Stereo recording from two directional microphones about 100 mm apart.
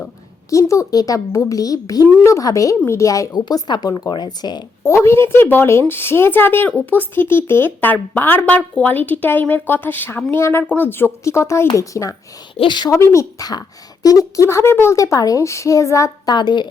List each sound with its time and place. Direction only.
0.5 s a woman's voice: 30° left (ahead or behind)
4.8 s a woman's voice: 30° left (ahead or behind)
12.5 s a woman's voice: 50° left (ahead or behind)
12.9 s speech: 30° left (ahead or behind)
13.4 s a woman's voice: 40° left (ahead or behind)
16.3 s a woman's voice: 45° left (ahead or behind)